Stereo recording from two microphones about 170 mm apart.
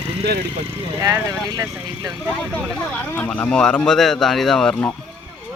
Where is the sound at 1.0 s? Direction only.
20° right (ahead or behind).